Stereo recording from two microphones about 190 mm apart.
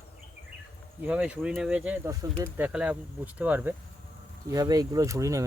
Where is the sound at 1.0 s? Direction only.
5° right (ahead or behind).